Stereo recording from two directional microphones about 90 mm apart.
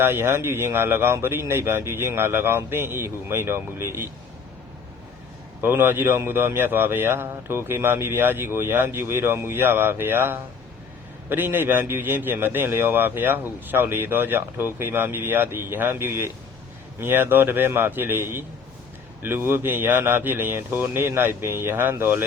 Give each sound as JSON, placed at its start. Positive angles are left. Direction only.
{"t": 0.0, "sound": "a man's voice", "side_deg": -25}
{"t": 5.6, "sound": "a man's voice", "side_deg": -25}